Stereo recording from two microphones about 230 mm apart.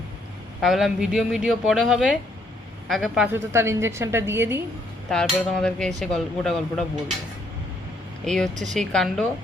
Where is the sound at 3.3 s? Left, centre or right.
Centre.